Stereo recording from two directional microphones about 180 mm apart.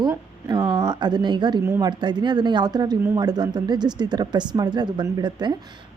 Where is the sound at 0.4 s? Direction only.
20° right (ahead or behind).